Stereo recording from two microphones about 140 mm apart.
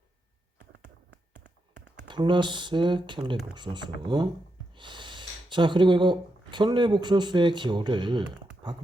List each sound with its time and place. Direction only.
2.0 s speech: 35° right (ahead or behind)